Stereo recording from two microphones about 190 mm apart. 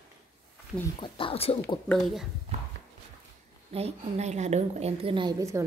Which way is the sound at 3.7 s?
35° right (ahead or behind).